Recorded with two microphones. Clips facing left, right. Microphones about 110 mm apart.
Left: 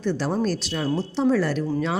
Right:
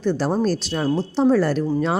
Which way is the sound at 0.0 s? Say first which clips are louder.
Right 3 dB; 35° right (ahead or behind).